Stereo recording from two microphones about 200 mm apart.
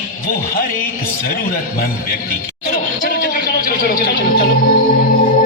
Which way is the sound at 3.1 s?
50° left (ahead or behind).